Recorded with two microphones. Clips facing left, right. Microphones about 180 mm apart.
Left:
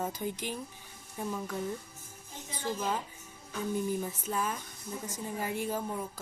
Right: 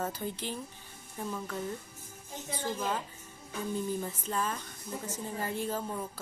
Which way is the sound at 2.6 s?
10° left (ahead or behind).